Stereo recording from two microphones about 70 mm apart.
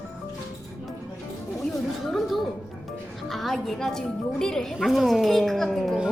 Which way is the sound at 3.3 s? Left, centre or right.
Centre.